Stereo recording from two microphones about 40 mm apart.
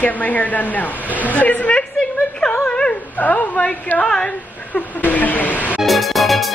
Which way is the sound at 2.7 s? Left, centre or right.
Left.